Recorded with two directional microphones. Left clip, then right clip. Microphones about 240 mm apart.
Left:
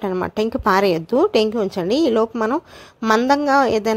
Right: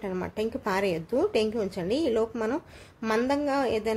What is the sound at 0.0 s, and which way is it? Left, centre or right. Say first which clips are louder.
A woman's voice: left 10 dB; left.